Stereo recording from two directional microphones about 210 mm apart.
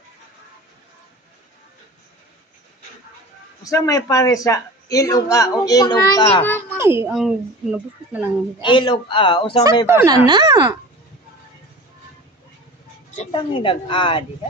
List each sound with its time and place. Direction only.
3.6 s a man's voice: 15° left (ahead or behind)
6.7 s a child's voice: 10° right (ahead or behind)
8.6 s a woman's voice: 20° left (ahead or behind)
9.8 s a child's voice: 10° right (ahead or behind)
13.1 s a woman's voice: 25° left (ahead or behind)